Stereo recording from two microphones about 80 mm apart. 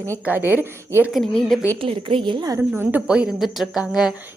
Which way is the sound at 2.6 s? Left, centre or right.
Right.